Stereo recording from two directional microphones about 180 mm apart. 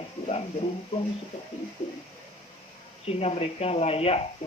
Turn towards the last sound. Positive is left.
turn(degrees=35)  # may be behind; listen again after turning